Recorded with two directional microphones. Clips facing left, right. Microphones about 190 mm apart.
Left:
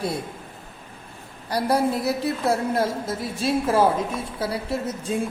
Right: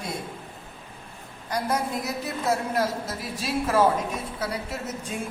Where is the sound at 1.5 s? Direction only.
30° left (ahead or behind).